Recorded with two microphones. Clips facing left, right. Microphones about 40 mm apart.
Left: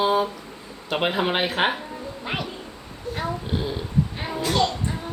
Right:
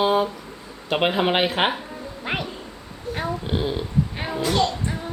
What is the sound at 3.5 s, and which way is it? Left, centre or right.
Speech, right.